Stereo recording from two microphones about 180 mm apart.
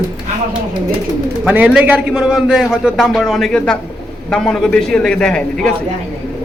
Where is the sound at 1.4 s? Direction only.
5° right (ahead or behind).